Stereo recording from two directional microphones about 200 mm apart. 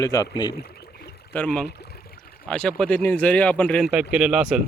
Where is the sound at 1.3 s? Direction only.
5° left (ahead or behind).